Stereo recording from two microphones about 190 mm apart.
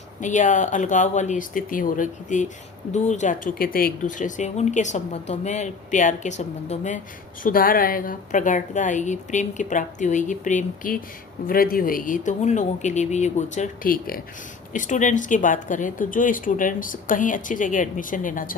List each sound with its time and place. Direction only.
0.2 s speech: 40° left (ahead or behind)
7.4 s speech: 50° left (ahead or behind)